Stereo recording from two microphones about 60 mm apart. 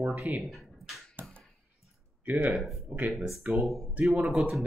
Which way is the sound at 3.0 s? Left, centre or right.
Right.